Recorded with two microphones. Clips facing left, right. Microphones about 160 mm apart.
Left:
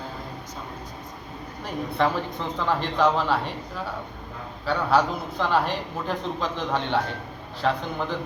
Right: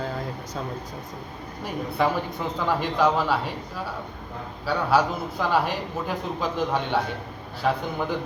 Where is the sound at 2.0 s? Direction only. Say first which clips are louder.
Even; 10° right (ahead or behind).